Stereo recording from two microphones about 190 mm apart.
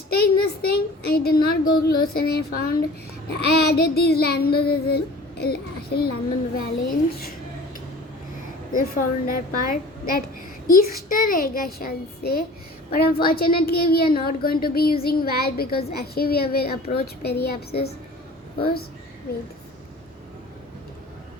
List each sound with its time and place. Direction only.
0.1 s a child's voice: 55° left (ahead or behind)
3.2 s child singing: 55° left (ahead or behind)
6.9 s speech: 50° left (ahead or behind)
8.7 s speech: 50° left (ahead or behind)
17.2 s child singing: 55° left (ahead or behind)